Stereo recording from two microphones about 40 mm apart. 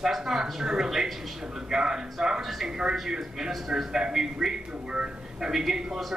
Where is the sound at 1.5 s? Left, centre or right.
Centre.